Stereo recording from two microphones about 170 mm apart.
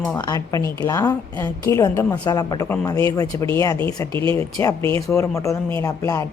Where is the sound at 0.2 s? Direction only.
25° left (ahead or behind).